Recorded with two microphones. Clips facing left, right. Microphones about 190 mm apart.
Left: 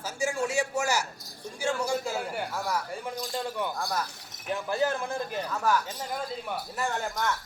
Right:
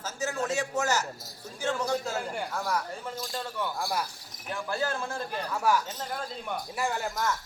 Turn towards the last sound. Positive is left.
turn(degrees=-5)  # may be behind; listen again after turning